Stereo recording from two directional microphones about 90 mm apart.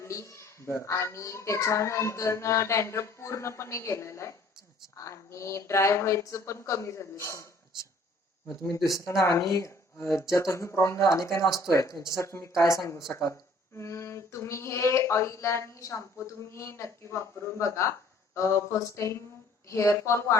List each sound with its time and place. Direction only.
0.0 s a child's voice: 30° left (ahead or behind)
9.0 s a child's voice: 35° left (ahead or behind)